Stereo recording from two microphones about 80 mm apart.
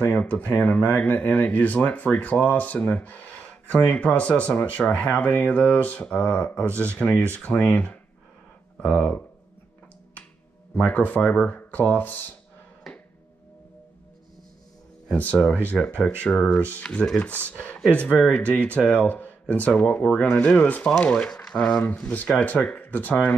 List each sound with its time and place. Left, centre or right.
0.0 s speech: centre
10.7 s speech: centre
12.9 s music: centre
15.1 s speech: left